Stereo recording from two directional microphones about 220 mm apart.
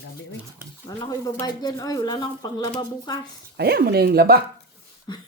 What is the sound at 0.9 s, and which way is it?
Speech, 15° left (ahead or behind).